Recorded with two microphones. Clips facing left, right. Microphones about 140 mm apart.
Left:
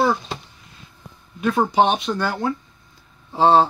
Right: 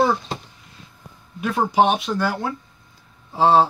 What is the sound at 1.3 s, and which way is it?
Speech, 5° right (ahead or behind).